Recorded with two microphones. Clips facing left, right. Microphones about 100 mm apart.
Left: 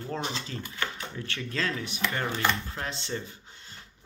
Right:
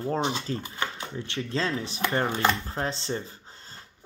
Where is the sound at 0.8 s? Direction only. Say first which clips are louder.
Right 2 dB; 25° right (ahead or behind).